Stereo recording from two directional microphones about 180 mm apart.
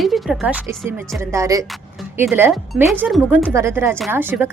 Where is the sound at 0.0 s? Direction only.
5° right (ahead or behind).